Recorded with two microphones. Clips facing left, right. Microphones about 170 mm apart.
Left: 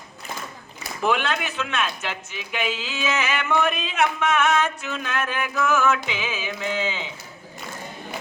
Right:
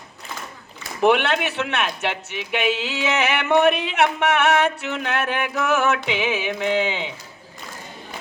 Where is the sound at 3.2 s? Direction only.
65° right (ahead or behind).